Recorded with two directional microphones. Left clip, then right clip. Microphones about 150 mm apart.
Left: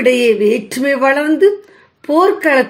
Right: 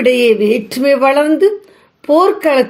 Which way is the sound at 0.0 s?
30° right (ahead or behind).